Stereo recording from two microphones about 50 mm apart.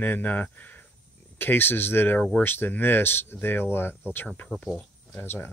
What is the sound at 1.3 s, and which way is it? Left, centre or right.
Speech, left.